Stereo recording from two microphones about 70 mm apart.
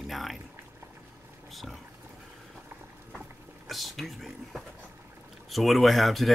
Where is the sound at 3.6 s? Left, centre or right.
Centre.